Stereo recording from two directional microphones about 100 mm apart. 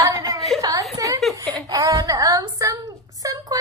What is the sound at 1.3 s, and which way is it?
Speech, centre (ahead or behind).